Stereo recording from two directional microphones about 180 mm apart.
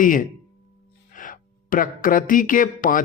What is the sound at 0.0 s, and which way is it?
Speech, 50° left (ahead or behind).